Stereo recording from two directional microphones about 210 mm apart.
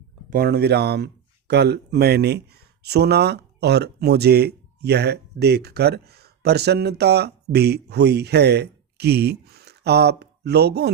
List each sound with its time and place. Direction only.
0.3 s speech: 45° right (ahead or behind)